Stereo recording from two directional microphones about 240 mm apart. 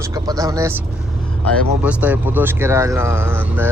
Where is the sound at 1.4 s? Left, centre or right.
Centre.